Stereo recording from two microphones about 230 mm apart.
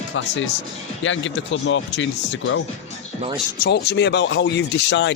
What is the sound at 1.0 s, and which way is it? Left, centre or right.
Speech, left.